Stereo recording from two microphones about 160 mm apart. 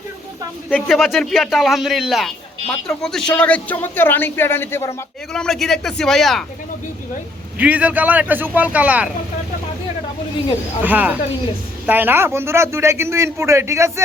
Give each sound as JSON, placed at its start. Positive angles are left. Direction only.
{"t": 0.7, "sound": "a man's voice", "side_deg": 0}
{"t": 5.3, "sound": "a man's voice", "side_deg": 5}
{"t": 7.6, "sound": "a man's voice", "side_deg": -10}
{"t": 10.8, "sound": "a man's voice", "side_deg": -10}